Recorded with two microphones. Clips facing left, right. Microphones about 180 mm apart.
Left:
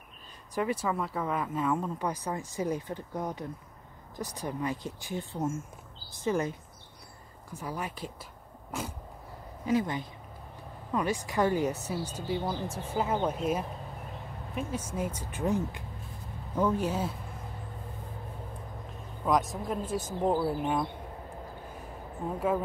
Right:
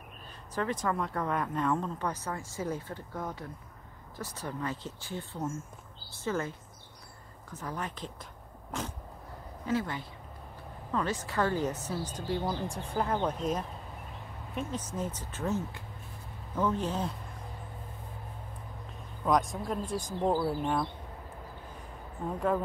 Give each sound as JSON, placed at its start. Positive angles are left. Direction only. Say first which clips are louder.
{"t": 0.6, "sound": "a woman's voice", "louder": "left 1 dB", "side_deg": 10}
{"t": 7.5, "sound": "a woman's voice", "louder": "left 1 dB", "side_deg": 10}
{"t": 19.2, "sound": "speech", "louder": "even", "side_deg": 0}